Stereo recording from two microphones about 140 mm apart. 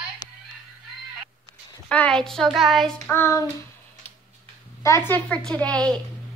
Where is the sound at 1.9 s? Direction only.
5° left (ahead or behind).